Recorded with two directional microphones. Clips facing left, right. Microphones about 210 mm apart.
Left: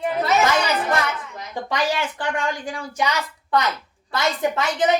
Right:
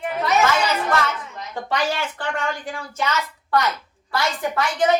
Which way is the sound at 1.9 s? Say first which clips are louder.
Left 1 dB; 15° left (ahead or behind).